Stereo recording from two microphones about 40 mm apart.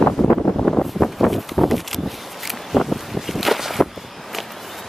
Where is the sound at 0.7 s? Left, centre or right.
Centre.